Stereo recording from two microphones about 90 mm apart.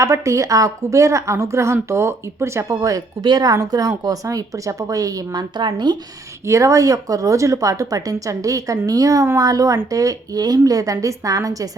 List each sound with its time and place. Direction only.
0.0 s a woman's voice: 35° right (ahead or behind); by 6.0 s 55° right (ahead or behind)
6.4 s a woman's voice: 35° right (ahead or behind)